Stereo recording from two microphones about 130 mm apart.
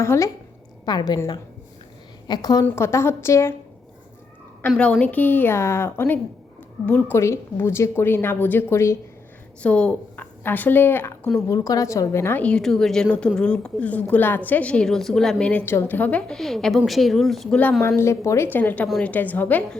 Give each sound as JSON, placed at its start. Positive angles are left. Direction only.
{"t": 0.0, "sound": "a woman's voice", "side_deg": 20}
{"t": 0.9, "sound": "a woman's voice", "side_deg": 35}
{"t": 2.2, "sound": "a woman's voice", "side_deg": 35}
{"t": 2.6, "sound": "a woman's voice", "side_deg": 20}
{"t": 4.8, "sound": "a woman's voice", "side_deg": 10}
{"t": 9.6, "sound": "a woman's voice", "side_deg": 10}
{"t": 17.8, "sound": "a woman's voice", "side_deg": 20}